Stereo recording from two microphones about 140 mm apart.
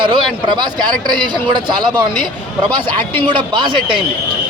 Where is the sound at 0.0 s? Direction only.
35° right (ahead or behind).